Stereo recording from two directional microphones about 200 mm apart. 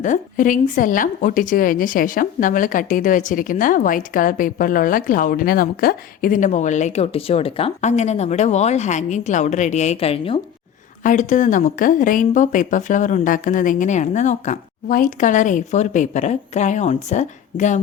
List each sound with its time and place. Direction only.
0.0 s a woman's voice: 40° left (ahead or behind)
11.0 s a woman's voice: 40° left (ahead or behind)